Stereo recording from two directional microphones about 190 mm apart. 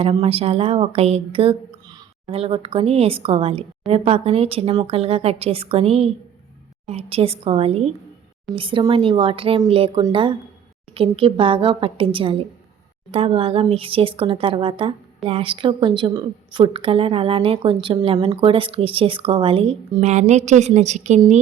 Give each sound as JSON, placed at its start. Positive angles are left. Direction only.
{"t": 0.0, "sound": "a woman's voice", "side_deg": -30}